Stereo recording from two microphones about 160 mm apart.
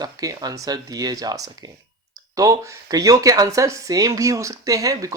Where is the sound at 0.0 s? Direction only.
25° right (ahead or behind).